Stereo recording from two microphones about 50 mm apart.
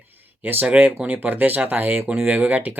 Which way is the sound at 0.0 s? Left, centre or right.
Right.